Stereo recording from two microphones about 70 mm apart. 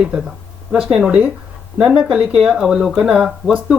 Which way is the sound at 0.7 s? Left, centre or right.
Centre.